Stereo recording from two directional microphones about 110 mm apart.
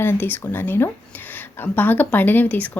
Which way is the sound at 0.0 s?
20° left (ahead or behind).